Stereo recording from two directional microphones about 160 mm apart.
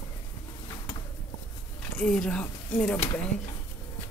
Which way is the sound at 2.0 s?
5° left (ahead or behind).